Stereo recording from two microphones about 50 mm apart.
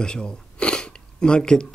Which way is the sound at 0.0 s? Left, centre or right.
Centre.